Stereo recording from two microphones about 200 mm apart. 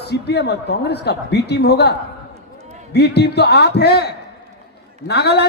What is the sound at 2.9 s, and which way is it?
A man's voice, 55° left (ahead or behind).